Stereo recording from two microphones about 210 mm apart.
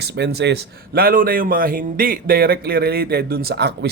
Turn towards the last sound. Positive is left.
turn(degrees=-55)  # may be behind; listen again after turning